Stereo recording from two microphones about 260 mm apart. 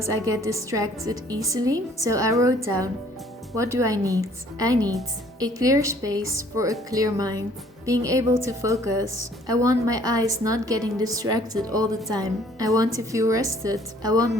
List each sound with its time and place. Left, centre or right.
0.0 s a woman's voice: centre